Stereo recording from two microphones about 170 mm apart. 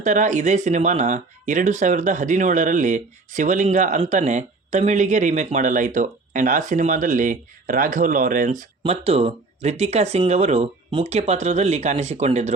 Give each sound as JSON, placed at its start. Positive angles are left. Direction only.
{"t": 0.0, "sound": "speech", "side_deg": -45}
{"t": 8.8, "sound": "speech", "side_deg": -35}